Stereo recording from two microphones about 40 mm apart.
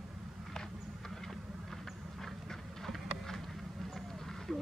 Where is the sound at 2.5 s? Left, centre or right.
Centre.